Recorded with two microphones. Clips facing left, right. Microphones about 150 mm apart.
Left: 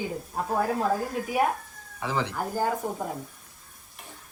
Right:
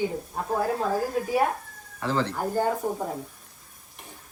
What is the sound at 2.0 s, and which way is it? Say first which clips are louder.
Speech: right 2 dB; 15° left (ahead or behind).